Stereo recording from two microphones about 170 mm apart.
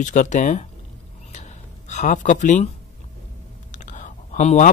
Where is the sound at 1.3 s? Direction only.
45° left (ahead or behind).